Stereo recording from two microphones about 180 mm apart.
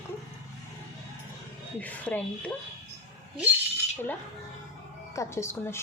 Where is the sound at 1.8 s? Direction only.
10° left (ahead or behind).